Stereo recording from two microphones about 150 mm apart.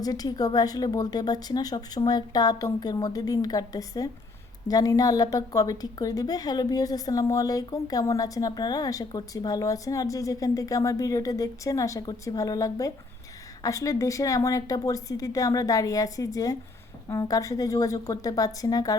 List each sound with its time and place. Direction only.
0.0 s a woman's voice: 25° left (ahead or behind)